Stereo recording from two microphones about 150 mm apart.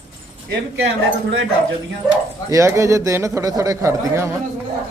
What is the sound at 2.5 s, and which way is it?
A man's voice, 20° right (ahead or behind).